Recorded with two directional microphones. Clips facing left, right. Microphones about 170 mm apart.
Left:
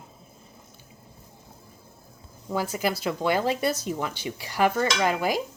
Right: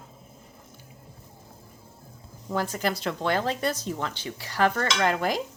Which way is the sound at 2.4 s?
5° left (ahead or behind).